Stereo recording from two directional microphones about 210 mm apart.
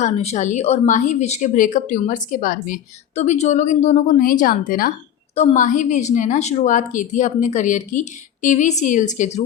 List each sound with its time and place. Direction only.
0.0 s speech: 30° left (ahead or behind)